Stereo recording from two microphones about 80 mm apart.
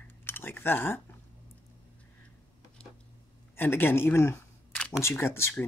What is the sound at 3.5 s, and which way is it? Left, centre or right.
Speech, left.